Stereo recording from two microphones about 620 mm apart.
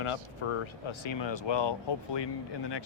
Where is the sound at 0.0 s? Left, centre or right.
Left.